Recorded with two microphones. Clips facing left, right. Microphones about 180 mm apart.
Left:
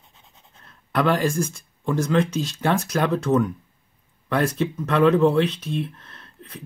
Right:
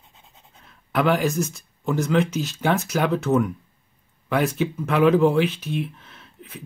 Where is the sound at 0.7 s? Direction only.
Centre (ahead or behind).